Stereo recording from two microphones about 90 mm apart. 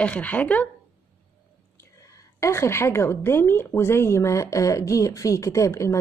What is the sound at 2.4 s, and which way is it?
A woman's voice, 30° left (ahead or behind).